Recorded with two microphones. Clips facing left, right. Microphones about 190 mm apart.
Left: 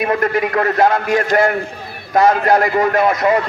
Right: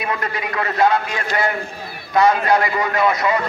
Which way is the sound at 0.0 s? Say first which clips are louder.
Left 8 dB; 50° left (ahead or behind).